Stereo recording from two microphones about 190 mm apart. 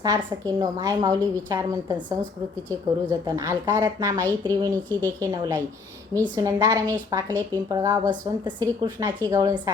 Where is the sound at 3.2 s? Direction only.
15° right (ahead or behind).